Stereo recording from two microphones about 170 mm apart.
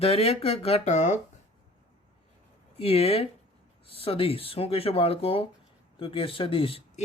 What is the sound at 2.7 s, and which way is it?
Speech, 35° left (ahead or behind).